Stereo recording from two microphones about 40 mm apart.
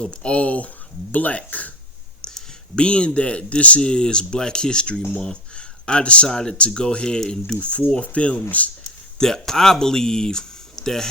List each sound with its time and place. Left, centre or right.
0.0 s speech: left
2.7 s speech: left
3.8 s speech: left
6.2 s speech: centre; by 8.7 s left
8.8 s speech: centre